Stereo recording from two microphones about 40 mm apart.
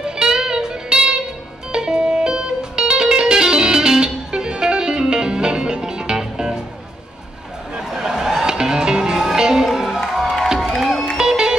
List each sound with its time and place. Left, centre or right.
0.2 s music: centre
7.9 s music: centre
9.7 s music: centre